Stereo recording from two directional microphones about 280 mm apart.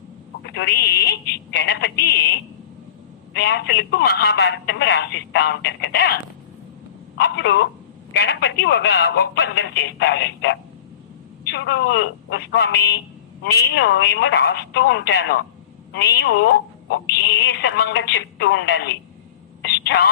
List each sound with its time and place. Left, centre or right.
0.4 s speech: left
7.2 s speech: left
19.6 s a sound: left